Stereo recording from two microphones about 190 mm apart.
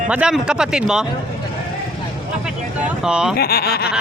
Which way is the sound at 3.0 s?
5° right (ahead or behind).